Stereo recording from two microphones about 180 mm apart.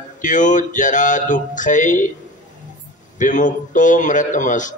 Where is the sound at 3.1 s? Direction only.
45° left (ahead or behind).